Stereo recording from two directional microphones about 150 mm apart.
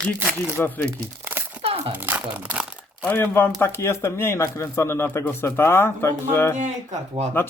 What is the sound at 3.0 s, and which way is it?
Speech, 15° left (ahead or behind).